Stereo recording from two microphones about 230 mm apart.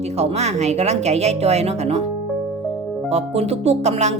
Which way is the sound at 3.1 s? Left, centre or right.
Right.